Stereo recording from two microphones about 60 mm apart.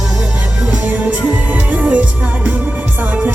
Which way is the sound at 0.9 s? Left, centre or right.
Right.